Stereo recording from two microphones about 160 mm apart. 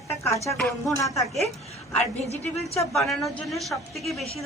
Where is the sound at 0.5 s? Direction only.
5° left (ahead or behind).